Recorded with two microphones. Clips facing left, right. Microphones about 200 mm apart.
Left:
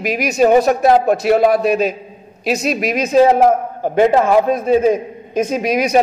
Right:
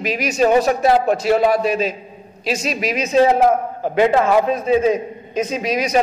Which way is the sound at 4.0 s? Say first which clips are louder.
Left 2 dB; 45° left (ahead or behind).